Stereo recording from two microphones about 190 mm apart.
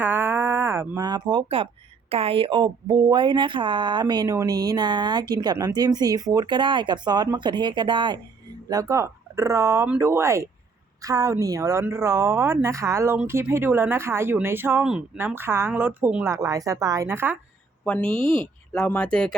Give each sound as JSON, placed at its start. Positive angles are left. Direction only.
{"t": 0.0, "sound": "a sound", "side_deg": -10}
{"t": 2.0, "sound": "speech", "side_deg": -30}
{"t": 17.8, "sound": "speech", "side_deg": 5}
{"t": 18.2, "sound": "speech", "side_deg": -25}
{"t": 18.7, "sound": "speech", "side_deg": 5}